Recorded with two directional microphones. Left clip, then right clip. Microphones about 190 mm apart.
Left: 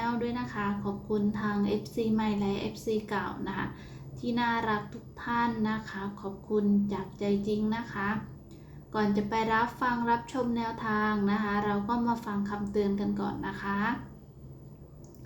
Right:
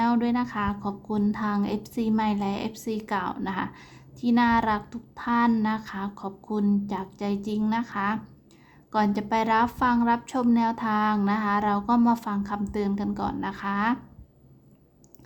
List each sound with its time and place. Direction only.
0.0 s a woman's voice: 40° right (ahead or behind)